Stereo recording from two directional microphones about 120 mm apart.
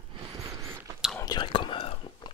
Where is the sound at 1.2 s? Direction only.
35° left (ahead or behind).